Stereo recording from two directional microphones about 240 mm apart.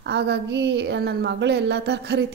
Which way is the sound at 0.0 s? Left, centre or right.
Right.